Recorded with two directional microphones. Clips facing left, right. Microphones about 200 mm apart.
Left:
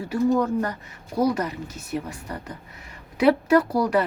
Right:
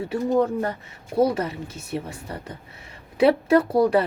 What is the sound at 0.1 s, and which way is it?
Speech, 25° right (ahead or behind).